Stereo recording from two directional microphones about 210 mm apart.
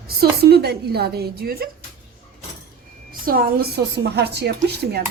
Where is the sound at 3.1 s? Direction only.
45° right (ahead or behind).